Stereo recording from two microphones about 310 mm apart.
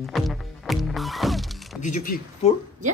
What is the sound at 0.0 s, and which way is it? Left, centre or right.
Music, centre.